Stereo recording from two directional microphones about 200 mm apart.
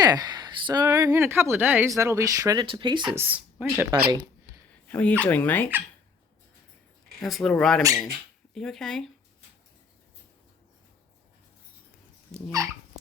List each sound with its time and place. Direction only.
0.0 s speech: 20° right (ahead or behind)
3.2 s speech: 5° right (ahead or behind)
4.7 s a sound: 5° left (ahead or behind)
5.2 s speech: 10° left (ahead or behind)
7.2 s speech: centre (ahead or behind)
12.6 s speech: 15° right (ahead or behind)